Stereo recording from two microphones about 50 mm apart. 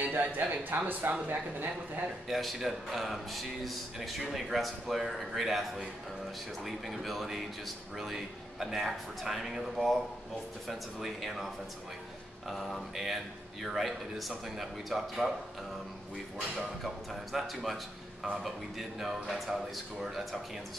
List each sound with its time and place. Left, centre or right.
0.0 s speech: right
2.2 s speech: centre
16.3 s speech: centre